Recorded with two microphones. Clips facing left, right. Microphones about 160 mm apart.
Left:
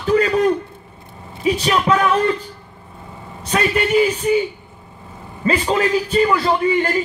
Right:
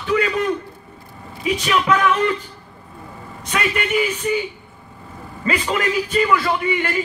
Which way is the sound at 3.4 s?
35° left (ahead or behind).